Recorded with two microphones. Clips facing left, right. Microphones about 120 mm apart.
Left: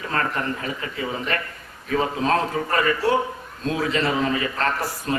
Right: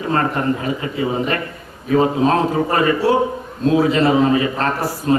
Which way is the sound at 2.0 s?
30° right (ahead or behind).